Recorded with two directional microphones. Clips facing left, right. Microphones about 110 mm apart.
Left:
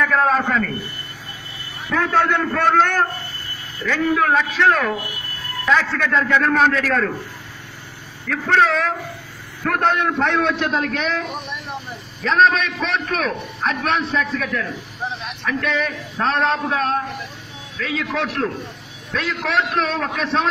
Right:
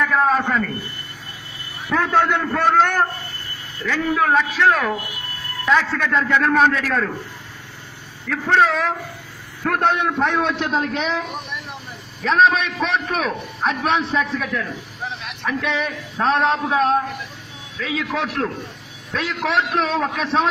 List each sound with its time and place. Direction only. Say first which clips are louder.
0.0 s a man's voice: even; 5° right (ahead or behind)
1.9 s a man's voice: even; 20° right (ahead or behind)
8.5 s a man's voice: even; 15° right (ahead or behind)
12.2 s a man's voice: even; 5° right (ahead or behind)